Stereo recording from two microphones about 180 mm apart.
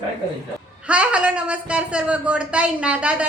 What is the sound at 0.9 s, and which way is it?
A woman's voice, 5° right (ahead or behind).